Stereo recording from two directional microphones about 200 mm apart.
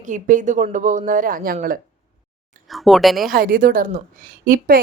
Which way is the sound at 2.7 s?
Centre (ahead or behind).